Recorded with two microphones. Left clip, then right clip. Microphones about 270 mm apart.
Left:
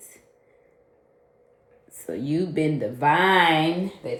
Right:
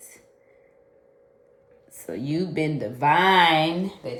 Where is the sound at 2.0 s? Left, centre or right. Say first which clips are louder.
Left 2 dB; right.